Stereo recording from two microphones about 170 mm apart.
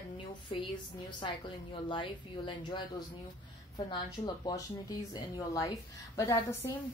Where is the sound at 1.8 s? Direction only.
30° left (ahead or behind).